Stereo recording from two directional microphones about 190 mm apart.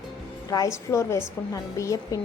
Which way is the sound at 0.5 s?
15° left (ahead or behind).